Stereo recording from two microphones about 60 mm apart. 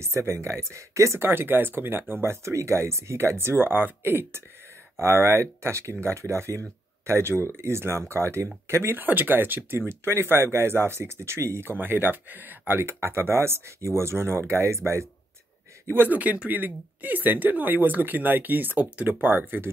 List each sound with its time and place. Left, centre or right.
0.0 s speech: right
1.3 s speech: right
2.2 s speech: right
9.0 s speech: right
11.7 s speech: right
15.9 s speech: right
16.2 s speech: right